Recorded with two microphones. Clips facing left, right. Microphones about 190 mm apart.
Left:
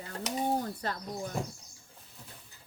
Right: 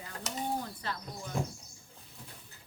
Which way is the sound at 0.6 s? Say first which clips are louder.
Left 4 dB; 45° left (ahead or behind).